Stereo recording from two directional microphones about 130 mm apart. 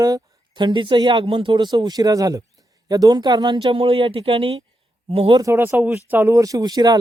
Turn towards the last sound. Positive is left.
turn(degrees=-30)  # may be behind; listen again after turning